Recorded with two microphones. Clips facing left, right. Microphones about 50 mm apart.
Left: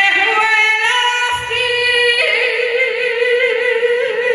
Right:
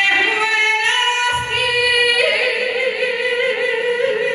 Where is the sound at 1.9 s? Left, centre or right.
Centre.